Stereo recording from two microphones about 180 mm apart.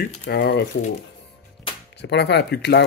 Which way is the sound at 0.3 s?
65° left (ahead or behind).